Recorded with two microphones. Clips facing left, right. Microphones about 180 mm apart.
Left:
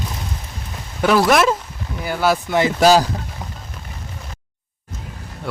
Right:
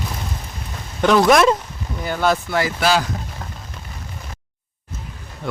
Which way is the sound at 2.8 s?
40° left (ahead or behind).